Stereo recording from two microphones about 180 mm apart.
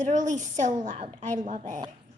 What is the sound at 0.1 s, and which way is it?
A woman's voice, 45° right (ahead or behind).